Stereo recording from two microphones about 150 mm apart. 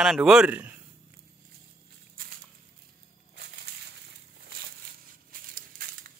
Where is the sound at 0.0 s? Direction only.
5° right (ahead or behind).